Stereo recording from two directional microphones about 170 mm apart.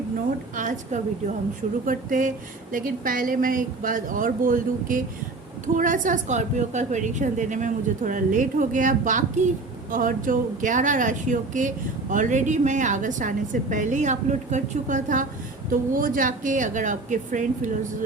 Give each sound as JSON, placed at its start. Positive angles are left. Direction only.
{"t": 0.5, "sound": "a woman's voice", "side_deg": -50}